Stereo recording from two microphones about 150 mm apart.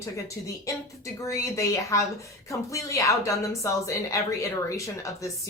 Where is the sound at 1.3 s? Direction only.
20° left (ahead or behind).